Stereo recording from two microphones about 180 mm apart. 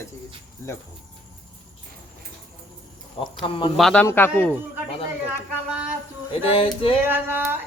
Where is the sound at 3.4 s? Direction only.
30° left (ahead or behind).